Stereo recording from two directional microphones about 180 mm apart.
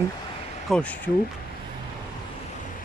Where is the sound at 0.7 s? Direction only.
5° left (ahead or behind).